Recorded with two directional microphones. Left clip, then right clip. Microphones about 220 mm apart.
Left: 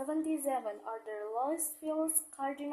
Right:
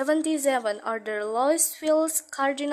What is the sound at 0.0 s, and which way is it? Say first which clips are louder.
A woman's voice: right 11 dB; 45° right (ahead or behind).